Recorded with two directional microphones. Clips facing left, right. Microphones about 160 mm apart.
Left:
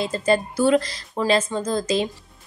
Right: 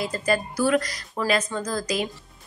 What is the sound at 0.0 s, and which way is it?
A woman's voice, 25° left (ahead or behind).